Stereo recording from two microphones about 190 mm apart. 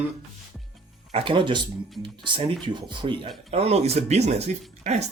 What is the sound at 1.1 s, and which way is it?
Speech, 25° right (ahead or behind).